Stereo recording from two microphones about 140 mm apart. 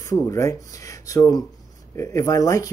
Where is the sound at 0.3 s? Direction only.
25° left (ahead or behind).